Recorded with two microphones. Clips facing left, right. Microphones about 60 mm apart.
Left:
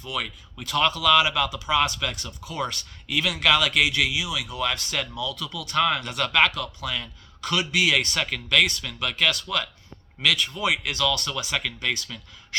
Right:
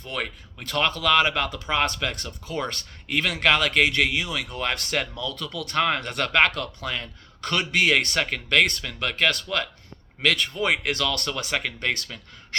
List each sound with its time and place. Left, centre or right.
0.0 s speech: right
5.7 s speech: right
6.0 s speech: right
11.8 s speech: right